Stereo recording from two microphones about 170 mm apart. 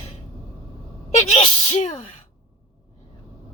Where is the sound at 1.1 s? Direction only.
40° left (ahead or behind).